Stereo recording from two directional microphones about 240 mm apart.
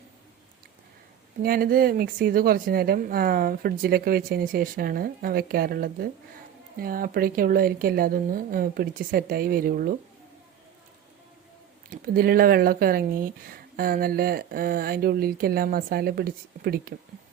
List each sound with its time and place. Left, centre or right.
1.4 s speech: right
11.9 s speech: right